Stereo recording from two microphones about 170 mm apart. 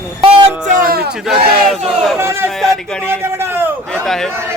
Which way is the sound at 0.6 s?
50° right (ahead or behind).